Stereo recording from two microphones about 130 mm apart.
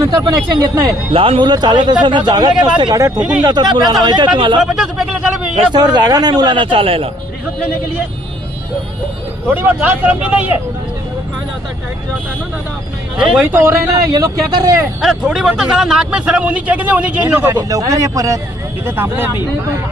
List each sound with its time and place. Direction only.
0.0 s speech: 25° right (ahead or behind)
1.1 s speech: 45° right (ahead or behind)
3.2 s a man's voice: 10° right (ahead or behind)
3.4 s speech: 35° right (ahead or behind)
4.6 s a man's voice: 5° right (ahead or behind)
5.5 s speech: 35° right (ahead or behind)
9.5 s a man's voice: 15° right (ahead or behind)
13.1 s a man's voice: 10° right (ahead or behind); by 14.8 s 25° right (ahead or behind)
15.0 s a man's voice: 5° right (ahead or behind)
17.5 s speech: 30° right (ahead or behind)
18.9 s a man's voice: 15° right (ahead or behind)